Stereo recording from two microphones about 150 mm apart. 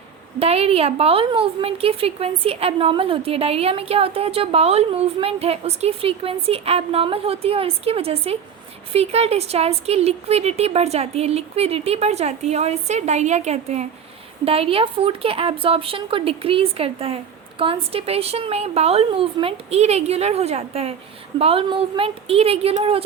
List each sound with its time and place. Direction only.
0.3 s a woman's voice: 40° right (ahead or behind)